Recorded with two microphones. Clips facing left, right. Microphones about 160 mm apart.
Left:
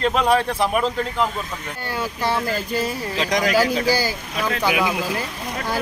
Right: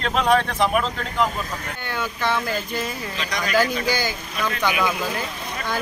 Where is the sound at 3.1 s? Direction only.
90° left.